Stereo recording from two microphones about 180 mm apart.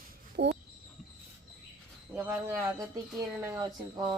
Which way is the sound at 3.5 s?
20° right (ahead or behind).